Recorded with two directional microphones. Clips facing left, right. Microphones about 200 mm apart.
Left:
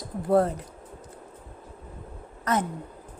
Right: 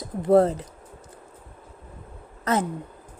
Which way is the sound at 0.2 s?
25° right (ahead or behind).